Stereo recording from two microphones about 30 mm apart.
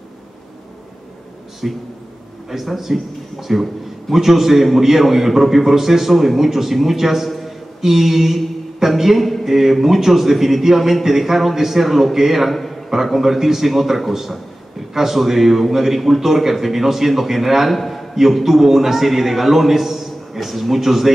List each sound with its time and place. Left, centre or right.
1.6 s a man's voice: centre
7.2 s a sound: centre
7.8 s a man's voice: centre
12.4 s a man's voice: centre
12.9 s a man's voice: centre
18.4 s a man's voice: centre